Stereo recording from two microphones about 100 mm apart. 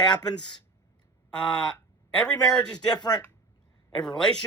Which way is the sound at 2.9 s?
45° left (ahead or behind).